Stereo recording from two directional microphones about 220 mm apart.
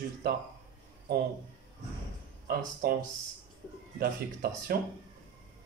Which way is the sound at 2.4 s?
40° right (ahead or behind).